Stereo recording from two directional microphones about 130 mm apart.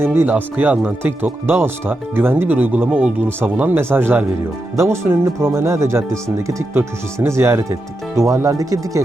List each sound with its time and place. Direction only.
0.0 s speech: 15° right (ahead or behind)